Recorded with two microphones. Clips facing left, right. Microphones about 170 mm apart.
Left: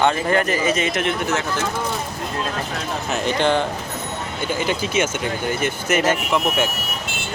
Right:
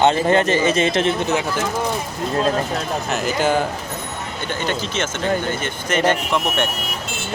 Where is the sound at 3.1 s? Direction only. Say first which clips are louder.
Even; 5° right (ahead or behind).